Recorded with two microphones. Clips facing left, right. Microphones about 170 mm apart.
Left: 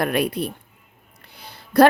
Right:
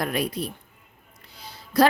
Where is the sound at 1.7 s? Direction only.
60° left (ahead or behind).